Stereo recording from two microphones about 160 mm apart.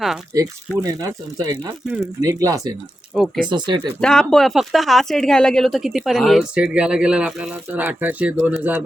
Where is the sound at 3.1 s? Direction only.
5° right (ahead or behind).